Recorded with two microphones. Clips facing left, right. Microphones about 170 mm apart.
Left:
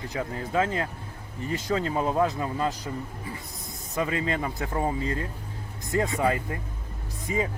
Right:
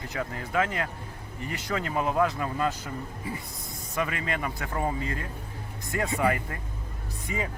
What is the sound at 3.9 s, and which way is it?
Speech, 25° left (ahead or behind).